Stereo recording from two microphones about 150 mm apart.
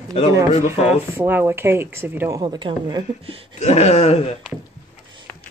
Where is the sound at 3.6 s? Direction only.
45° left (ahead or behind).